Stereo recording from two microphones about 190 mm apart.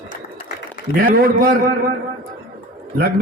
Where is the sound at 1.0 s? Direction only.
50° right (ahead or behind).